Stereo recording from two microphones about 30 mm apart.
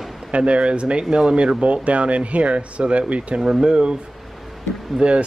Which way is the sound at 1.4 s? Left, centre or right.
Right.